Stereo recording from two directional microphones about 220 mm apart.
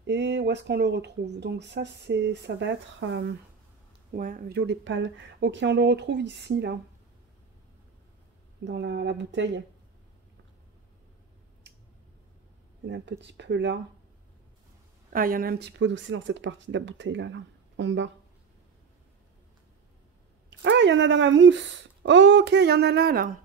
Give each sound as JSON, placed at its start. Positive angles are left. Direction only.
{"t": 0.0, "sound": "speech", "side_deg": -50}
{"t": 4.1, "sound": "speech", "side_deg": -40}
{"t": 8.6, "sound": "speech", "side_deg": -50}
{"t": 12.8, "sound": "speech", "side_deg": -50}
{"t": 15.1, "sound": "speech", "side_deg": -40}
{"t": 20.4, "sound": "speech", "side_deg": -55}